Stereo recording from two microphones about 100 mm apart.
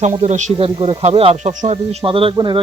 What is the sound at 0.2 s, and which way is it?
Speech, 70° right (ahead or behind).